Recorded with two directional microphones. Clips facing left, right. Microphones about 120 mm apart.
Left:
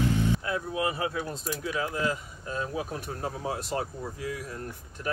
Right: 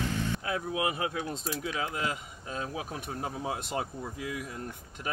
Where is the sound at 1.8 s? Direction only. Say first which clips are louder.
Left 5 dB; 20° right (ahead or behind).